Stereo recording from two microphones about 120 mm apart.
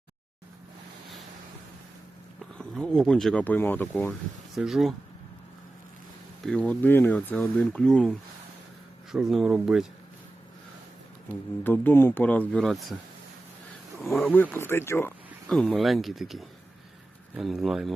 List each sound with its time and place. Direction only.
2.6 s speech: 5° left (ahead or behind)
3.4 s speech: 15° left (ahead or behind)
4.5 s speech: centre (ahead or behind)
6.4 s speech: 5° left (ahead or behind)
9.1 s speech: 5° right (ahead or behind)
11.6 s speech: 15° left (ahead or behind)
14.1 s speech: centre (ahead or behind)
14.3 s speech: 15° left (ahead or behind)
15.4 s speech: 5° left (ahead or behind)